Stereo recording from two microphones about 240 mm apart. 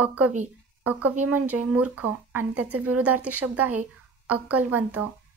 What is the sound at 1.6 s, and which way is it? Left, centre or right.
Speech, right.